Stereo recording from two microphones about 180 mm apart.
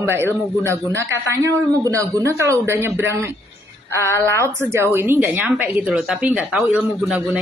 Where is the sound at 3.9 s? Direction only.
15° left (ahead or behind).